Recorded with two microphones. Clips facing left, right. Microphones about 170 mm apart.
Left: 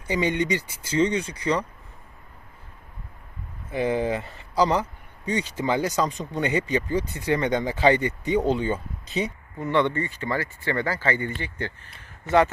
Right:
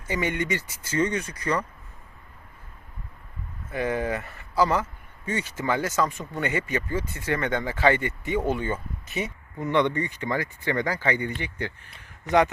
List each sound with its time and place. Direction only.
0.1 s speech: 25° left (ahead or behind)
0.3 s speech: 15° left (ahead or behind)
3.7 s speech: 20° left (ahead or behind)
9.6 s speech: 15° right (ahead or behind)